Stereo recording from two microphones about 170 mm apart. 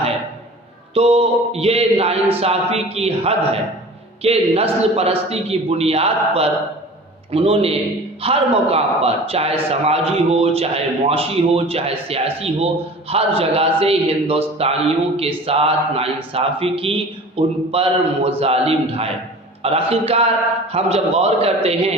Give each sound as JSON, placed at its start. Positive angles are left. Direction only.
{"t": 0.9, "sound": "a man's voice", "side_deg": -35}